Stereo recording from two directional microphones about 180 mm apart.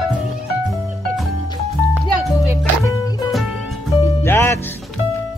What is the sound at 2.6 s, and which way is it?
Music, 15° left (ahead or behind).